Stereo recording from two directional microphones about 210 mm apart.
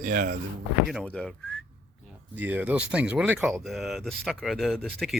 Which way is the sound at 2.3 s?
10° right (ahead or behind).